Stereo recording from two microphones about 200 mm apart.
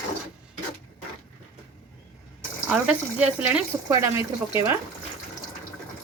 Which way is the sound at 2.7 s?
5° right (ahead or behind).